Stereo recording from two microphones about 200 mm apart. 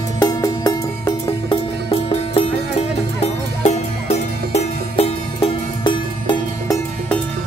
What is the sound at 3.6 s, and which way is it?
Music, 35° left (ahead or behind).